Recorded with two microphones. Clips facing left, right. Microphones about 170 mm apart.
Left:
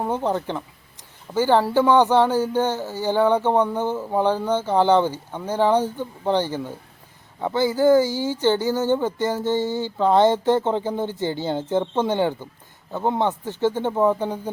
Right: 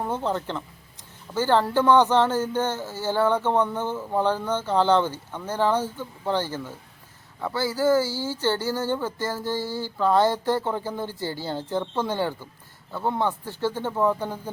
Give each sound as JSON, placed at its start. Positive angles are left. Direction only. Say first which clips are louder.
{"t": 0.0, "sound": "speech", "louder": "left 3 dB", "side_deg": 15}